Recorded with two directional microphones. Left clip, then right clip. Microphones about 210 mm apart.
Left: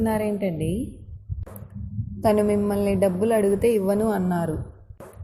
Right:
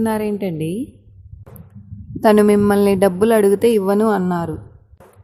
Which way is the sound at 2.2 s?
35° right (ahead or behind).